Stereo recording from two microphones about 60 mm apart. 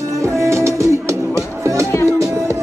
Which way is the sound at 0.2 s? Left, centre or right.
Right.